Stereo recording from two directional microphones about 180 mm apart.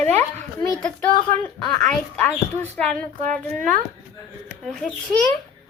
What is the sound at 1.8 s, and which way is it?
Speech, 5° left (ahead or behind).